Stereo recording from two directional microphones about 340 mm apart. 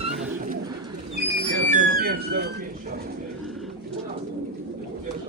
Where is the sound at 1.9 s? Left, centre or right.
Right.